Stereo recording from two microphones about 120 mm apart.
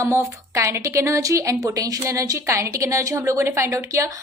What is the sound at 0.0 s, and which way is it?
A woman's voice, 25° right (ahead or behind).